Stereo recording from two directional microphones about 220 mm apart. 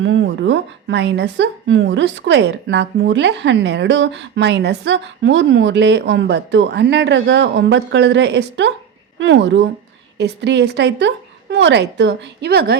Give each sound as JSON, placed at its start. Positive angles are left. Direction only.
{"t": 0.0, "sound": "a woman's voice", "side_deg": -55}